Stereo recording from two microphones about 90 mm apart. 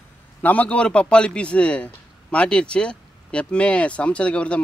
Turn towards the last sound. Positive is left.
turn(degrees=10)  # may be behind; listen again after turning